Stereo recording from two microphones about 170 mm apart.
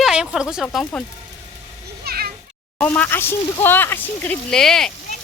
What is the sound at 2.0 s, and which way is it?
Children playing, 65° right (ahead or behind).